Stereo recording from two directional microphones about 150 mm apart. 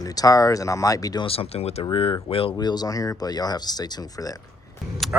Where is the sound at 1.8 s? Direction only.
30° left (ahead or behind).